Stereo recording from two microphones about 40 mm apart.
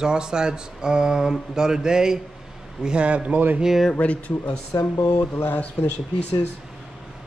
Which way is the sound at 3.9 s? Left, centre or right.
Left.